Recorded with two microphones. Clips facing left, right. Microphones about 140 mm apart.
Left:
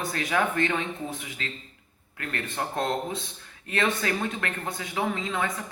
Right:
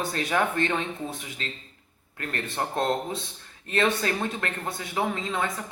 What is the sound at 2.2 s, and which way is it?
Speech, 30° right (ahead or behind).